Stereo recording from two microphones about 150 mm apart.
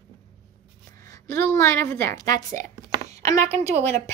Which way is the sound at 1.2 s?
15° left (ahead or behind).